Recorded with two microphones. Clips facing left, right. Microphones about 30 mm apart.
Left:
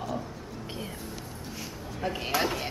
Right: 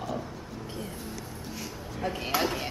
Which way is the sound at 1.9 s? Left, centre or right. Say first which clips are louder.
Even; centre.